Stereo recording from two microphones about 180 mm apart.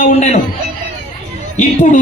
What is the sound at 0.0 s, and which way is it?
Speech, 40° left (ahead or behind).